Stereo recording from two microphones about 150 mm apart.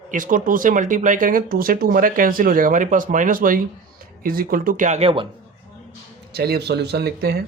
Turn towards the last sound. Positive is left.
turn(degrees=-90)